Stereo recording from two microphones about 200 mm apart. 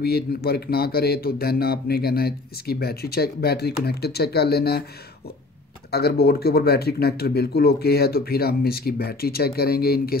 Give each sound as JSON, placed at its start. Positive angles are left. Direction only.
{"t": 0.0, "sound": "speech", "side_deg": 50}
{"t": 5.9, "sound": "speech", "side_deg": 50}